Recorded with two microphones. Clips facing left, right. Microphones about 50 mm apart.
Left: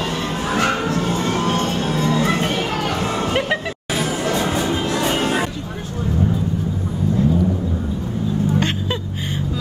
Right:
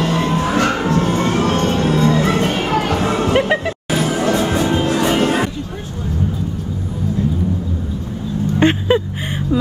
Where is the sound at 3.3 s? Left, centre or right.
Centre.